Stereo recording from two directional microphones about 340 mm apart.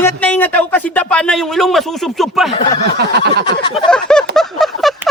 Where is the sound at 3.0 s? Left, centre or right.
Right.